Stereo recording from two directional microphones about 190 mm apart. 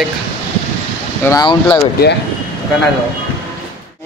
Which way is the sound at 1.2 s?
20° left (ahead or behind).